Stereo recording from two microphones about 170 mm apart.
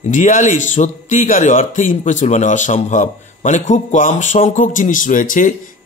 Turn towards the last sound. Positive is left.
turn(degrees=50)  # may be behind; listen again after turning